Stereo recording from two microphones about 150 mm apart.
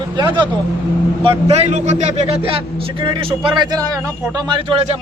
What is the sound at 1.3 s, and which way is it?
A man's voice, 45° right (ahead or behind).